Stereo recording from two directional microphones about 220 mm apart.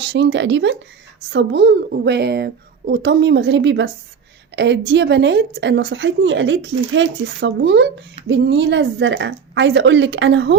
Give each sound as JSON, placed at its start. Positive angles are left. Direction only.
{"t": 0.0, "sound": "a woman's voice", "side_deg": -50}